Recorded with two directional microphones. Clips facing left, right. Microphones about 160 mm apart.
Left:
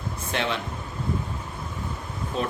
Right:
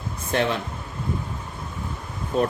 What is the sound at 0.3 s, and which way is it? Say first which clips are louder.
Speech: right 5 dB; 40° right (ahead or behind).